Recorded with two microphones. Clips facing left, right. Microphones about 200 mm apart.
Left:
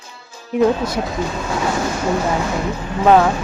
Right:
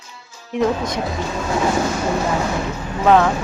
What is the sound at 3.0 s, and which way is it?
Speech, 10° left (ahead or behind).